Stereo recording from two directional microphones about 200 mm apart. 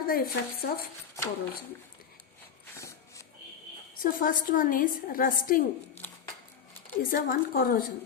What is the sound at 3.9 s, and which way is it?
A woman's voice, 45° left (ahead or behind).